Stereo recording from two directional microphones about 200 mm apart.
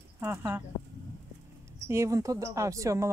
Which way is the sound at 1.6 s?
15° right (ahead or behind).